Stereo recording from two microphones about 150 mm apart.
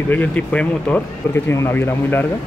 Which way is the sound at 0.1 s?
10° left (ahead or behind).